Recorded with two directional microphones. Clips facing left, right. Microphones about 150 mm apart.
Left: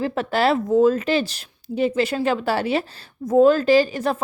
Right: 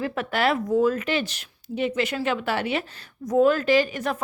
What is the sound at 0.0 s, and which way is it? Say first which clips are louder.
A woman's voice: left 4 dB; 30° left (ahead or behind).